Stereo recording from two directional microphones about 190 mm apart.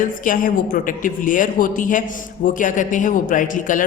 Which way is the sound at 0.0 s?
45° left (ahead or behind).